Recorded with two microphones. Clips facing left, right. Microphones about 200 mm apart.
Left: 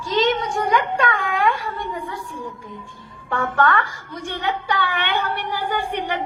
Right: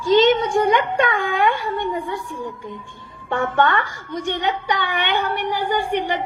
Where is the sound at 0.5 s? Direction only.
25° right (ahead or behind).